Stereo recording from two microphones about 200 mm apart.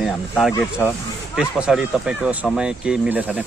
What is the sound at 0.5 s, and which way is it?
Speech, 10° left (ahead or behind).